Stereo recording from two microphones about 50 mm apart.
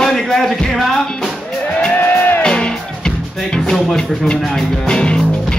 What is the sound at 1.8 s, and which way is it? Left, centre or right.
Music, left.